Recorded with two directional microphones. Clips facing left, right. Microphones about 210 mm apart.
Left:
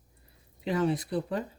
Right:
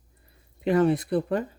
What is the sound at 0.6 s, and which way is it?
Speech, 60° right (ahead or behind).